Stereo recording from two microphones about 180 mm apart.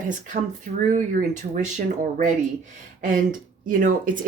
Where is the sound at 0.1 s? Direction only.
45° right (ahead or behind).